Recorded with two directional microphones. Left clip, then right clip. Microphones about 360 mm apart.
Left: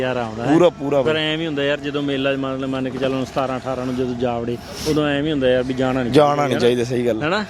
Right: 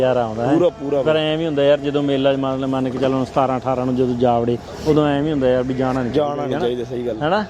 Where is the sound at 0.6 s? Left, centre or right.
Left.